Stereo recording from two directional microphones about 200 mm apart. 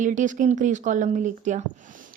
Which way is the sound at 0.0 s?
40° right (ahead or behind).